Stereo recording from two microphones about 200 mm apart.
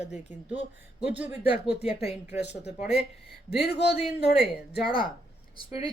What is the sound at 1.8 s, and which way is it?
Speech, 30° left (ahead or behind).